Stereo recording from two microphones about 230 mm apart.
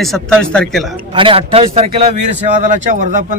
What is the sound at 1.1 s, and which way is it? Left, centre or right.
A man's voice, right.